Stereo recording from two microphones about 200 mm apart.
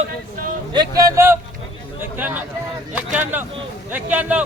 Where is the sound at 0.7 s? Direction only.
20° right (ahead or behind).